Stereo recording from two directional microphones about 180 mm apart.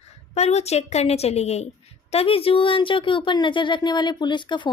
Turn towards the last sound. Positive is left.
turn(degrees=25)  # may be behind; listen again after turning